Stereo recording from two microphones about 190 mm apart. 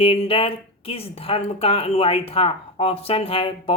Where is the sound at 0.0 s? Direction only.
30° left (ahead or behind).